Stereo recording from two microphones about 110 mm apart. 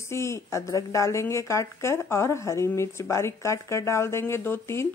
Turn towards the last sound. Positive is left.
turn(degrees=25)  # may be behind; listen again after turning